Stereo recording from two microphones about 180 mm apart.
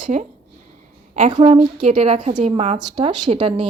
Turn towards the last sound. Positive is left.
turn(degrees=-30)  # may be behind; listen again after turning